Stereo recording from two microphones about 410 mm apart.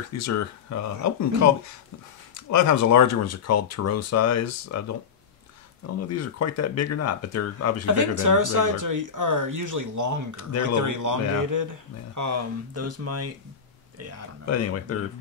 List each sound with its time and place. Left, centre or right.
0.2 s speech: left
2.3 s speech: left
5.9 s speech: left
7.8 s speech: right
14.4 s speech: left